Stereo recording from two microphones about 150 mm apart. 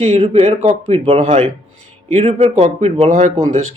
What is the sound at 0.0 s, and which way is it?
Speech, 40° right (ahead or behind).